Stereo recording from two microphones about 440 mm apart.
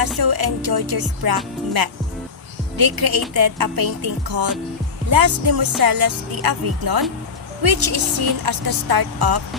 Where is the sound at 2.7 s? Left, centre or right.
Right.